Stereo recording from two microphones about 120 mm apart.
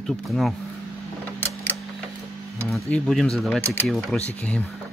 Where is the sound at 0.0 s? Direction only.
5° left (ahead or behind).